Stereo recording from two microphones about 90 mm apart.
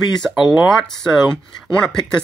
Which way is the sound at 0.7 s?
5° left (ahead or behind).